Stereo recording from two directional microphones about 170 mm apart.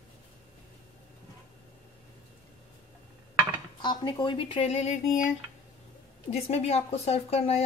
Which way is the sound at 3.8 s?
25° left (ahead or behind).